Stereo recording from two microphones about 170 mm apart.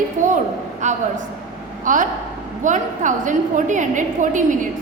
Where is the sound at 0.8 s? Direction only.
45° right (ahead or behind).